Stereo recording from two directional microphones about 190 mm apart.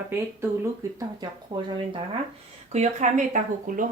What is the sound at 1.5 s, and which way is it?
Speech, 25° right (ahead or behind).